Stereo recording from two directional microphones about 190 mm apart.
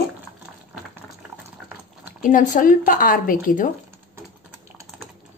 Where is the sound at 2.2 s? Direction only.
45° left (ahead or behind).